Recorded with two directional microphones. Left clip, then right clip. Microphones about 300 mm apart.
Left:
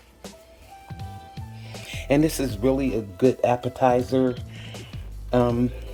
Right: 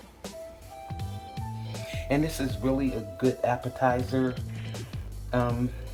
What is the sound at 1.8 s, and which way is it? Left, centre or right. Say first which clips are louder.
Speech: left 7 dB; left.